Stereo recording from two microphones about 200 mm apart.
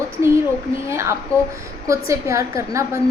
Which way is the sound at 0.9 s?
15° right (ahead or behind).